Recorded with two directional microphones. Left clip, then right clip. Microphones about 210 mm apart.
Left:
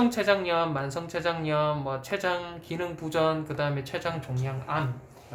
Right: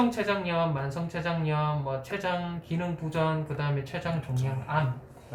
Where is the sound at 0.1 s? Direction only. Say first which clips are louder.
Left 4 dB; 50° left (ahead or behind).